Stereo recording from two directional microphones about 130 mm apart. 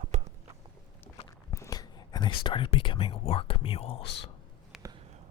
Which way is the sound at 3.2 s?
45° left (ahead or behind).